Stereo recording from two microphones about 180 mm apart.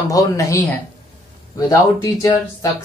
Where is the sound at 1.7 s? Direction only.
15° left (ahead or behind).